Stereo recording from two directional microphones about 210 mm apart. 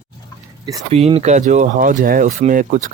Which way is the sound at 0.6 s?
15° right (ahead or behind).